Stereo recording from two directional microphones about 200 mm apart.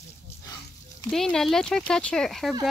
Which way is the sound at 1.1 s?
Centre (ahead or behind).